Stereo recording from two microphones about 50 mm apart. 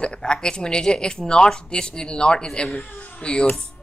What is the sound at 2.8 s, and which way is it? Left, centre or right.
Speech, left.